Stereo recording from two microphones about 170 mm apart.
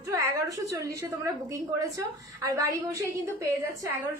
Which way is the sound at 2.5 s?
20° right (ahead or behind).